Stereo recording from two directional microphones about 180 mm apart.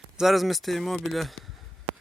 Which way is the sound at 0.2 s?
Centre (ahead or behind).